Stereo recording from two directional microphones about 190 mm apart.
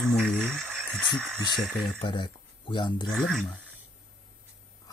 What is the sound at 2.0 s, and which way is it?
Speech, 25° left (ahead or behind).